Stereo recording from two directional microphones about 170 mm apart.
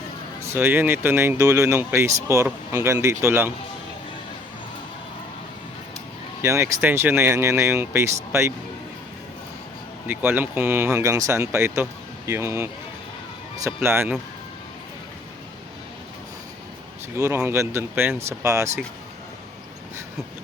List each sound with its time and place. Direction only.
0.4 s speech: 15° right (ahead or behind)
6.4 s speech: 15° right (ahead or behind)
10.1 s speech: 10° right (ahead or behind)
13.8 s speech: 15° right (ahead or behind)
17.2 s speech: 15° right (ahead or behind)